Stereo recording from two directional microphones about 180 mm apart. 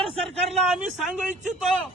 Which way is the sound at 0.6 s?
5° right (ahead or behind).